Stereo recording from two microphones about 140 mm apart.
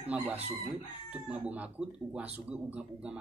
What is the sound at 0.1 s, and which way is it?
Speech, 10° right (ahead or behind).